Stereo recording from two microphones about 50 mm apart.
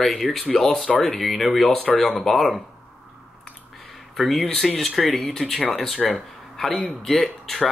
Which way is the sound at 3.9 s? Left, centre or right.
Centre.